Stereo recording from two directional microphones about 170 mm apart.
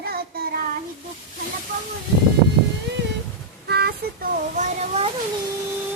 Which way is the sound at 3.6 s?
70° right (ahead or behind).